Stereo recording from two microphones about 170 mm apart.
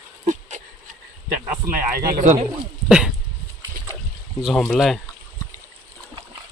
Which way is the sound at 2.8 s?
5° right (ahead or behind).